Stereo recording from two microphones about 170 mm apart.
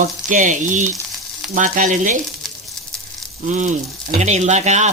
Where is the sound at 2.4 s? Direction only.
Centre (ahead or behind).